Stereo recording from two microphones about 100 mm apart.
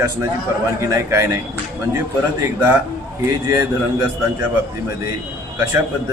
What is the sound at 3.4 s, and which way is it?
Speech, 30° right (ahead or behind).